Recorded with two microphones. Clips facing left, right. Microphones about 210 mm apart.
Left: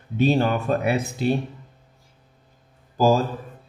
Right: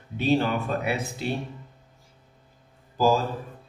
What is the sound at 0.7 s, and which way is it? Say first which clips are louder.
Speech: left 6 dB; 45° left (ahead or behind).